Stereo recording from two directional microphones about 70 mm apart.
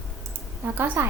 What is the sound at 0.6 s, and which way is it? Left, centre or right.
Speech, right.